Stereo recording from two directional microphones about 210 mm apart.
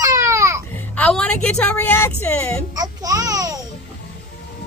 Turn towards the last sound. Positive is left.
turn(degrees=-15)  # may be behind; listen again after turning